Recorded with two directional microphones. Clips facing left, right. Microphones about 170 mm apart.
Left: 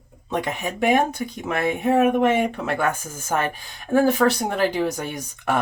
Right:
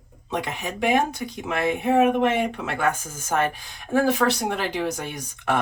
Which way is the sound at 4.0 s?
45° left (ahead or behind).